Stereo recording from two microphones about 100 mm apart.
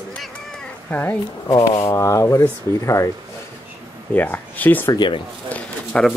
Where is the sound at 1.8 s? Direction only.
30° left (ahead or behind).